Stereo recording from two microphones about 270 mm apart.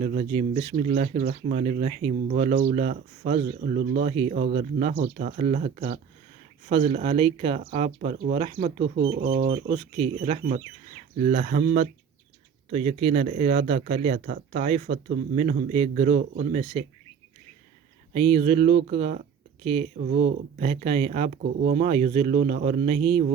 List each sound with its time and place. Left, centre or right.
0.0 s speech: right
18.1 s speech: right